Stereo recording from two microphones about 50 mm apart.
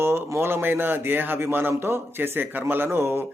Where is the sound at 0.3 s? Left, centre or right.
Right.